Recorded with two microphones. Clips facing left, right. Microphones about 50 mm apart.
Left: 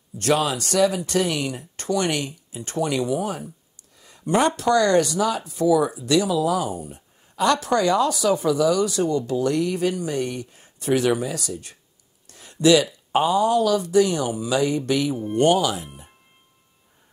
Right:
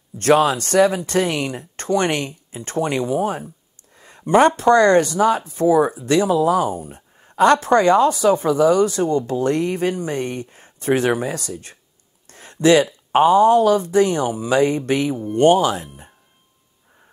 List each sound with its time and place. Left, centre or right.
0.2 s speech: right